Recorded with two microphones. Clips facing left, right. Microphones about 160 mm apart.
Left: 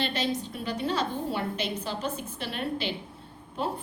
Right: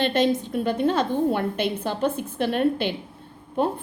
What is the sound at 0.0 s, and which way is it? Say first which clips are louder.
A woman's voice: right 8 dB; 50° right (ahead or behind).